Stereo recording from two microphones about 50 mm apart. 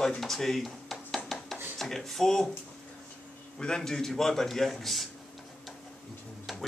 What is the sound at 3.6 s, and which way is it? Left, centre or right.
A man's voice, centre.